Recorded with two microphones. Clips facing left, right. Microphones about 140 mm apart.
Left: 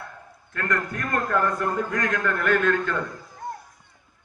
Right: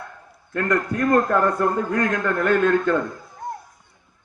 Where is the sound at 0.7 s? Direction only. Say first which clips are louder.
Right 8 dB; 35° right (ahead or behind).